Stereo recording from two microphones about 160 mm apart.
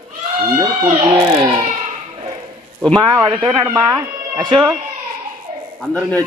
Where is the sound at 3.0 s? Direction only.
30° right (ahead or behind).